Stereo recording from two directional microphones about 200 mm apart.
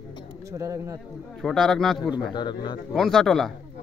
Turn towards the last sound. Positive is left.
turn(degrees=0)  # may be behind; listen again after turning